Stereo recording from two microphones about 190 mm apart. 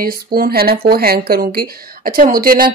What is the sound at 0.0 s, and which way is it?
Speech, 50° right (ahead or behind).